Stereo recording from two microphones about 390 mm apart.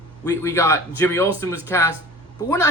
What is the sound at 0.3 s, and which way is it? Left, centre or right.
Speech, centre.